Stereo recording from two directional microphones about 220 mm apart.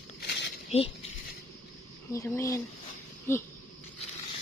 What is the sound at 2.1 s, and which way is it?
Speech, 10° left (ahead or behind).